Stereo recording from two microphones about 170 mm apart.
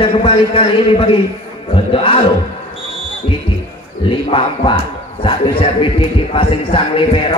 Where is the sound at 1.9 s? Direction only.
35° left (ahead or behind).